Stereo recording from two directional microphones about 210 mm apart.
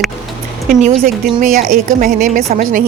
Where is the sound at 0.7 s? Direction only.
40° right (ahead or behind).